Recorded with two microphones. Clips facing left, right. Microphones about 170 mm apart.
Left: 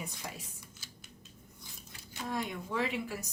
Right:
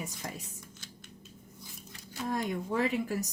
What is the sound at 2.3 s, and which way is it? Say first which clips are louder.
Speech: right 4 dB; 45° right (ahead or behind).